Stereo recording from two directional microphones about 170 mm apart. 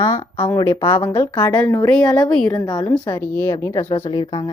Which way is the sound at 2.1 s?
5° left (ahead or behind).